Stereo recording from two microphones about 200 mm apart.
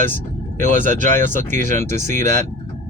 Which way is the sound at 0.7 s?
40° right (ahead or behind).